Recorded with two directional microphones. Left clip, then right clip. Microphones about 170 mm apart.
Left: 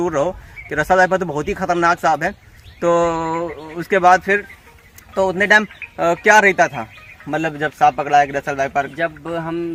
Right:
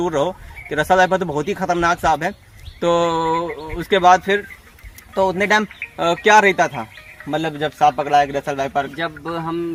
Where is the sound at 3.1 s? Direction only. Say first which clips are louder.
Right 1 dB; 5° left (ahead or behind).